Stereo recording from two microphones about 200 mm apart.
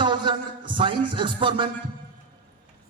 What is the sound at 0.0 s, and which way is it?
Music, 25° right (ahead or behind).